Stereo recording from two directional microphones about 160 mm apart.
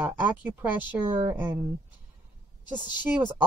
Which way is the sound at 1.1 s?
30° right (ahead or behind).